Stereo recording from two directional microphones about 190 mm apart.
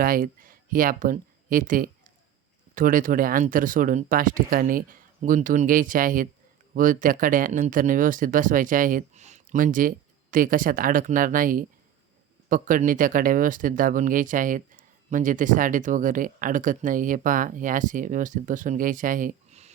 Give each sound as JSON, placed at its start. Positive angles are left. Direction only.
{"t": 0.0, "sound": "speech", "side_deg": -45}